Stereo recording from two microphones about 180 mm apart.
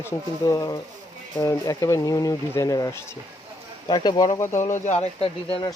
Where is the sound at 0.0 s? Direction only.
15° left (ahead or behind).